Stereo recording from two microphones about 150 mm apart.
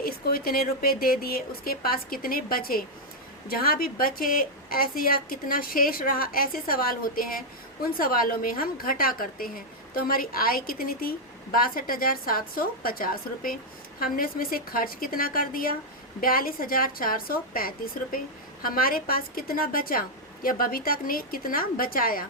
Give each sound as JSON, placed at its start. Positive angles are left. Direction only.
{"t": 0.0, "sound": "a woman's voice", "side_deg": 80}